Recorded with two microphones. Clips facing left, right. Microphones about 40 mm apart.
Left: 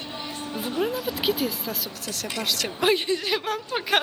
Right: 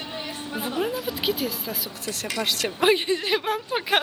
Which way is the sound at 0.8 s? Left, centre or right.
Centre.